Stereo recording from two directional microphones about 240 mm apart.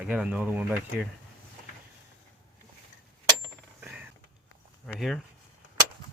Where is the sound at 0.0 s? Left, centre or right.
Centre.